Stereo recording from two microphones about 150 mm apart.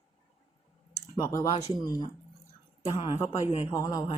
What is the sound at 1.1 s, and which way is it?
Speech, 20° left (ahead or behind).